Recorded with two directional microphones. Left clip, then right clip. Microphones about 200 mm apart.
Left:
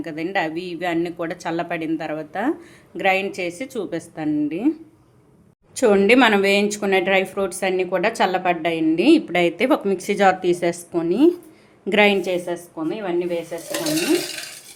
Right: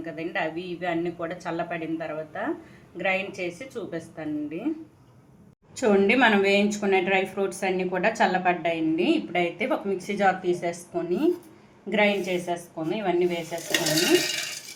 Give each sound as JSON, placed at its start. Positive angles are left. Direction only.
{"t": 0.0, "sound": "a woman's voice", "side_deg": 55}
{"t": 5.8, "sound": "a woman's voice", "side_deg": 40}
{"t": 12.9, "sound": "speech", "side_deg": 30}